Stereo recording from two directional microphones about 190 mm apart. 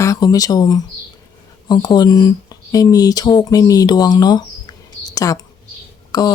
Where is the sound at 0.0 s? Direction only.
20° left (ahead or behind).